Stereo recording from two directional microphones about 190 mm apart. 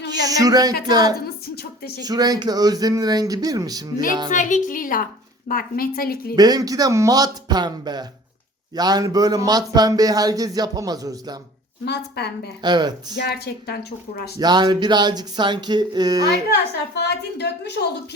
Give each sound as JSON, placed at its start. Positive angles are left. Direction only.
{"t": 0.1, "sound": "speech", "side_deg": -20}
{"t": 4.3, "sound": "a woman's voice", "side_deg": 40}
{"t": 6.3, "sound": "speech", "side_deg": -20}
{"t": 11.9, "sound": "a woman's voice", "side_deg": 60}
{"t": 12.6, "sound": "speech", "side_deg": -20}
{"t": 13.1, "sound": "a woman's voice", "side_deg": 60}
{"t": 14.3, "sound": "speech", "side_deg": -20}
{"t": 16.9, "sound": "a woman's voice", "side_deg": 60}